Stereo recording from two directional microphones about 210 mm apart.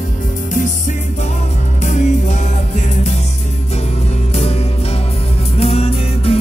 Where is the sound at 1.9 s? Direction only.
35° left (ahead or behind).